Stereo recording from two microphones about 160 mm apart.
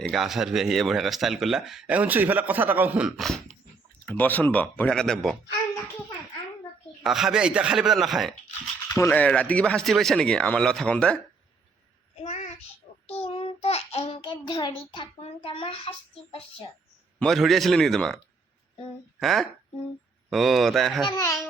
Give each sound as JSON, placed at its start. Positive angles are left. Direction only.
{"t": 0.1, "sound": "speech", "side_deg": 0}
{"t": 3.2, "sound": "dog", "side_deg": 5}
{"t": 4.0, "sound": "speech", "side_deg": 10}
{"t": 7.0, "sound": "speech", "side_deg": 0}
{"t": 8.9, "sound": "speech", "side_deg": 15}
{"t": 12.1, "sound": "child singing", "side_deg": 45}
{"t": 17.2, "sound": "speech", "side_deg": 0}
{"t": 19.2, "sound": "speech", "side_deg": 0}
{"t": 21.1, "sound": "speech", "side_deg": 20}